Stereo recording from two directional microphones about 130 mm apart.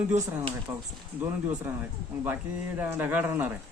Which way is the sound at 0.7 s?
20° right (ahead or behind).